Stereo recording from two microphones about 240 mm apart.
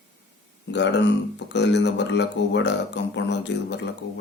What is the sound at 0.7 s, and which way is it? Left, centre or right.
Speech, left.